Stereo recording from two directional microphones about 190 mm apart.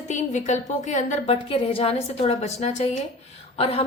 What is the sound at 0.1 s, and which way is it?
A woman's voice, 40° left (ahead or behind).